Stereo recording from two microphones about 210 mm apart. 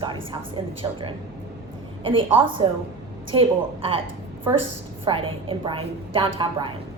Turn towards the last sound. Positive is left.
turn(degrees=-25)  # may be behind; listen again after turning